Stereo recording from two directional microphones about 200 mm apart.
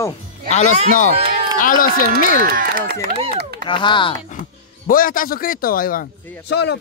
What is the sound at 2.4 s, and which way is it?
Speech, 45° right (ahead or behind).